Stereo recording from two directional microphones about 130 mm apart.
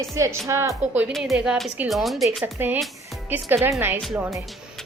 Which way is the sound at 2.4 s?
15° right (ahead or behind).